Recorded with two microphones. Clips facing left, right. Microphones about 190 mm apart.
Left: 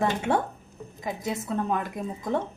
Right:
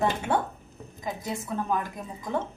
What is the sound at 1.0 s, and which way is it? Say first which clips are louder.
Speech: left 2 dB; 25° left (ahead or behind).